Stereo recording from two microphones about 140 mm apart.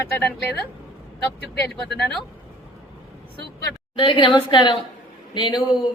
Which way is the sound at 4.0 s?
35° left (ahead or behind).